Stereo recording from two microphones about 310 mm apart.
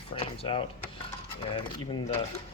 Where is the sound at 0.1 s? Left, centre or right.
Centre.